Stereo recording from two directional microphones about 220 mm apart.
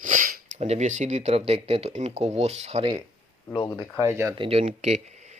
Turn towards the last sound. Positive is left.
turn(degrees=-30)  # may be behind; listen again after turning